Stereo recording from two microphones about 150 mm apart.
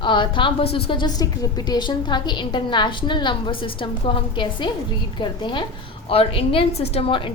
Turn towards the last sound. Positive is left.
turn(degrees=35)  # may be behind; listen again after turning